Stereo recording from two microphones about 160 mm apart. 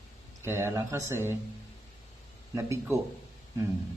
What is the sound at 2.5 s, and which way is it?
Speech, 15° right (ahead or behind).